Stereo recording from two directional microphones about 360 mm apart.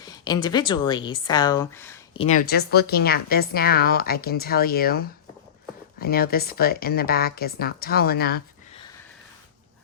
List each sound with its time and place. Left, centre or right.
0.0 s speech: centre
2.2 s a woman's voice: left